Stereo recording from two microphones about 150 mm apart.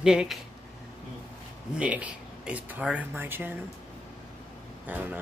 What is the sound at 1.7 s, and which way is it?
Speech, 10° right (ahead or behind).